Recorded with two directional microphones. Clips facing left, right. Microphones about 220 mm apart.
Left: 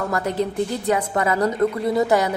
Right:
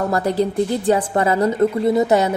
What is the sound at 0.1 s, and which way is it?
A woman's voice, 35° right (ahead or behind).